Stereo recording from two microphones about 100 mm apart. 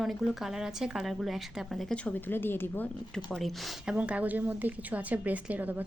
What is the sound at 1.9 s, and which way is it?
Speech, 15° left (ahead or behind).